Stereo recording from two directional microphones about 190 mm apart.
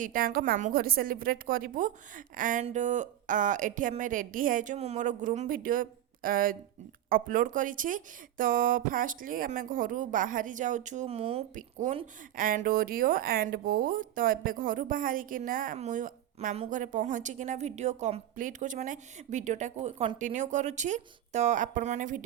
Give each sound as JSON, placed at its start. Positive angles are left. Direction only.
{"t": 0.0, "sound": "speech", "side_deg": -45}